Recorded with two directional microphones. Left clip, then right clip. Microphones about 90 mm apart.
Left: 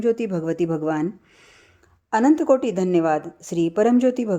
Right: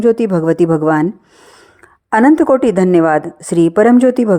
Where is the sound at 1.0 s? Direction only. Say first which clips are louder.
Right 9 dB; 35° right (ahead or behind).